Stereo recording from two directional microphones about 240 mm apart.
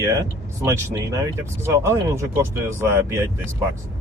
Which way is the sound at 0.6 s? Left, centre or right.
Centre.